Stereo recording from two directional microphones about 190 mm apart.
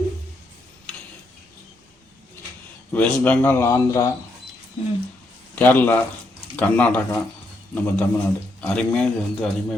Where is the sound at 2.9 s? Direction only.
5° left (ahead or behind).